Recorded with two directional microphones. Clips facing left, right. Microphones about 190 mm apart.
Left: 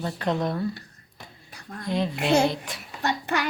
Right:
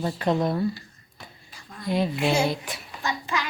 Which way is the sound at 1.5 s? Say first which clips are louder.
Left 5 dB; 60° left (ahead or behind).